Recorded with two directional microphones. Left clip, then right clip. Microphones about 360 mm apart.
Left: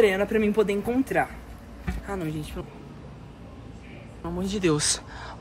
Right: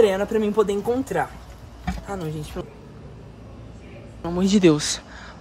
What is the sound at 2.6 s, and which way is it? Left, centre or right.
Speech, right.